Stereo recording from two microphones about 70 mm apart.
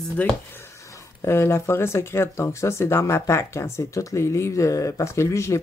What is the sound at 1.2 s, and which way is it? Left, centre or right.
Speech, left.